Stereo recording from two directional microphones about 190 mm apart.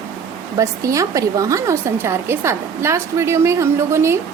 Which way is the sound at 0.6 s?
15° right (ahead or behind).